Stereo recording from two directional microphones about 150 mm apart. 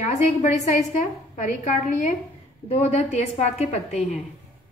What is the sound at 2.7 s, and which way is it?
A woman's voice, 50° left (ahead or behind).